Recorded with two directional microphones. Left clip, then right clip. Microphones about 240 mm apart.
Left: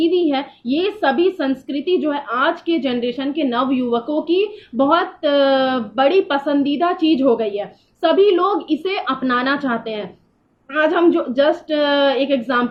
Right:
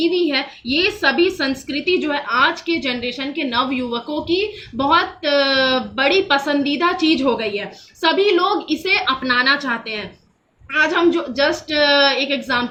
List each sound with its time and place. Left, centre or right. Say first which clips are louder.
0.0 s a woman's voice: left 1 dB; centre